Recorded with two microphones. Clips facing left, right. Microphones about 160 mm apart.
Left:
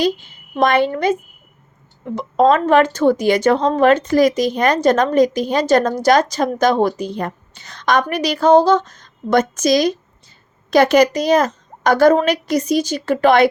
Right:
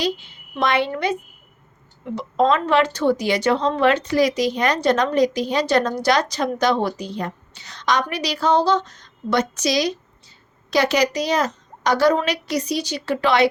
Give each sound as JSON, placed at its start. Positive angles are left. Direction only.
{"t": 0.0, "sound": "speech", "side_deg": 45}